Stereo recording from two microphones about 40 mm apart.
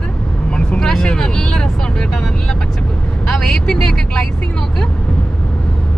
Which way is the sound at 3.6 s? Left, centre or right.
Centre.